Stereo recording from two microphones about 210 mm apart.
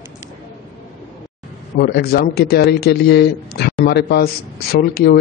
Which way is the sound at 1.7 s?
50° left (ahead or behind).